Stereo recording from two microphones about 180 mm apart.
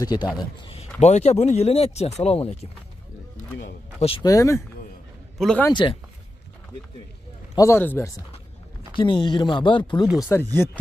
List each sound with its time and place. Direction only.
0.0 s a man's voice: 20° left (ahead or behind)
4.2 s speech: 20° left (ahead or behind)
5.4 s speech: 5° left (ahead or behind)
5.7 s speech: 25° left (ahead or behind)
7.5 s speech: 15° left (ahead or behind)
8.9 s speech: 25° left (ahead or behind)
10.0 s speech: 5° right (ahead or behind)
10.3 s speech: 15° left (ahead or behind)